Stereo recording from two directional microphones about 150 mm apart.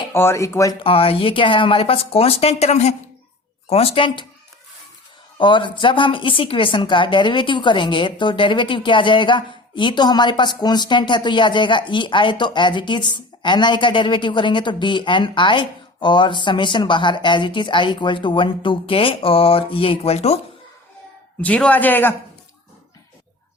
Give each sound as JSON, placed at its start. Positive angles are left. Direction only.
{"t": 0.1, "sound": "speech", "side_deg": 15}
{"t": 0.8, "sound": "a woman's voice", "side_deg": 40}
{"t": 5.4, "sound": "a woman's voice", "side_deg": 35}
{"t": 21.4, "sound": "a man's voice", "side_deg": 10}